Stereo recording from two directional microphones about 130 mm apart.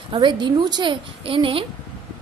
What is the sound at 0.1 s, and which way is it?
A woman's voice, 35° right (ahead or behind).